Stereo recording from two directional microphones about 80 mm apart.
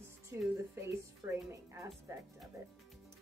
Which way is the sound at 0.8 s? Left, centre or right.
Right.